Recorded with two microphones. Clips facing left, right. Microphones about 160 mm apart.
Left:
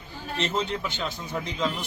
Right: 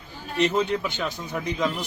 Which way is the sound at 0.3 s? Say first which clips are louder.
Right 6 dB; 15° right (ahead or behind).